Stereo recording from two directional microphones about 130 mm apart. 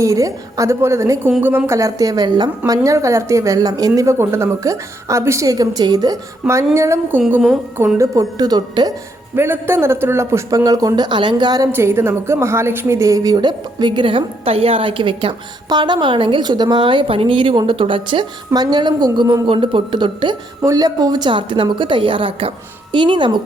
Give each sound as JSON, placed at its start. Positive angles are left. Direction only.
{"t": 0.0, "sound": "a woman's voice", "side_deg": -25}
{"t": 6.4, "sound": "speech", "side_deg": -5}
{"t": 6.7, "sound": "a woman's voice", "side_deg": -20}
{"t": 9.3, "sound": "a woman's voice", "side_deg": -15}
{"t": 11.7, "sound": "a woman's voice", "side_deg": -20}
{"t": 20.6, "sound": "a woman's voice", "side_deg": -25}